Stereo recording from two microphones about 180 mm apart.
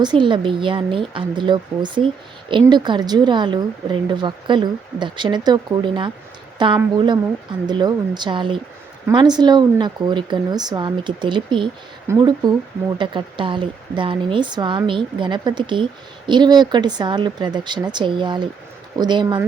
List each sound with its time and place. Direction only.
0.0 s a woman's voice: 25° right (ahead or behind)